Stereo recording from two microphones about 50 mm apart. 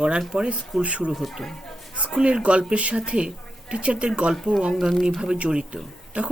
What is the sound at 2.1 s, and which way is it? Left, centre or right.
A woman's voice, centre.